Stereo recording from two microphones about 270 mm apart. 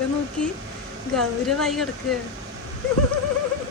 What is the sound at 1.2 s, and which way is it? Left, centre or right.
Speech, centre.